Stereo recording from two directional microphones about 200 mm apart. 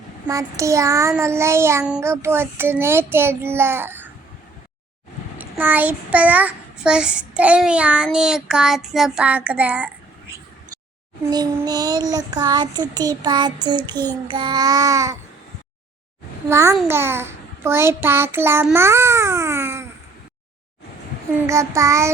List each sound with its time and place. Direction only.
0.3 s child singing: 15° right (ahead or behind)
5.4 s child singing: 10° right (ahead or behind)
11.3 s child singing: 20° right (ahead or behind)
16.5 s child singing: 15° right (ahead or behind)
21.4 s child singing: 15° right (ahead or behind)